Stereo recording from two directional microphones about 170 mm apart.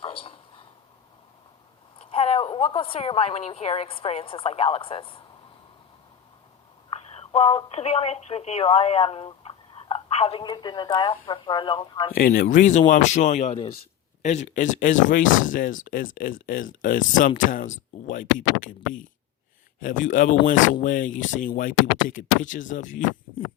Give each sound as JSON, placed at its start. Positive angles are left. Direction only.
{"t": 0.0, "sound": "a sound", "side_deg": 35}
{"t": 2.0, "sound": "a woman's voice", "side_deg": 35}
{"t": 7.1, "sound": "speech", "side_deg": 35}
{"t": 12.1, "sound": "speech", "side_deg": 60}